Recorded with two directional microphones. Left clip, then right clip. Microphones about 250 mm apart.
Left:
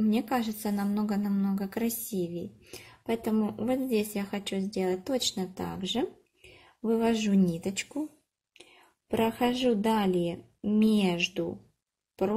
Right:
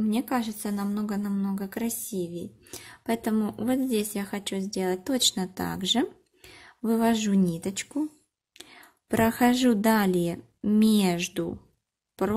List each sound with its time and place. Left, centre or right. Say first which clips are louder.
0.0 s a woman's voice: right 1 dB; centre
9.3 s a woman's voice: right 4 dB; centre